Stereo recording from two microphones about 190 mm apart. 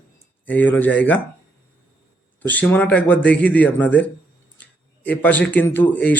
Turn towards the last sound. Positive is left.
turn(degrees=10)  # may be behind; listen again after turning